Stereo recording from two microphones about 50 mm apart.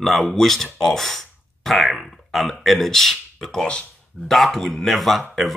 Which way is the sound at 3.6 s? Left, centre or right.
Centre.